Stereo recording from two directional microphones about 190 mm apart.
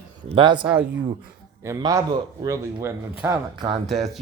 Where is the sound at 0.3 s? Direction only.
25° right (ahead or behind).